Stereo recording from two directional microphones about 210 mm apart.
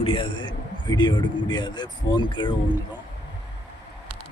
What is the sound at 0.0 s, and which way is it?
A man's voice, 25° left (ahead or behind).